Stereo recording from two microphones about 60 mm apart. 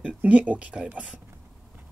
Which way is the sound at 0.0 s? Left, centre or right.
Right.